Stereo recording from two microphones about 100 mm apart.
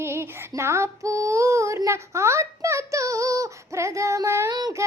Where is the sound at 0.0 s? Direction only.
25° right (ahead or behind).